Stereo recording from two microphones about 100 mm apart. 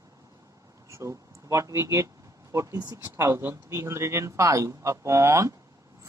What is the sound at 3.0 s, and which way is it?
Speech, 25° right (ahead or behind).